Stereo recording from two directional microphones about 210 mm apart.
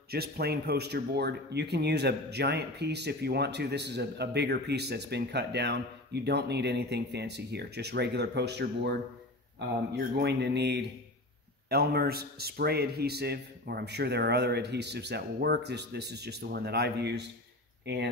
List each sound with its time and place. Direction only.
0.1 s speech: 50° right (ahead or behind)
9.9 s speech: 50° right (ahead or behind)